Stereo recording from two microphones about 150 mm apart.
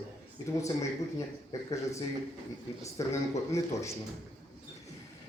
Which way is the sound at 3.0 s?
20° left (ahead or behind).